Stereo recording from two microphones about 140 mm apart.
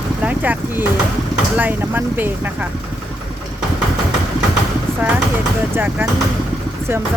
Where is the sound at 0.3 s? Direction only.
10° right (ahead or behind).